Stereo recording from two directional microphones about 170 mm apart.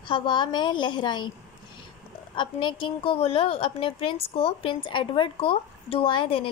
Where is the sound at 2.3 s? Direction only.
30° left (ahead or behind).